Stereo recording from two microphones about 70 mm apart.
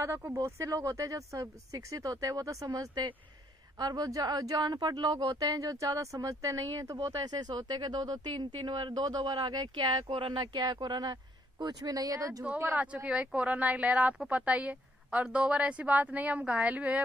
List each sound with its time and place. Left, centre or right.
0.0 s speech: right
11.6 s speech: right
12.5 s speech: right
12.8 s a woman's voice: centre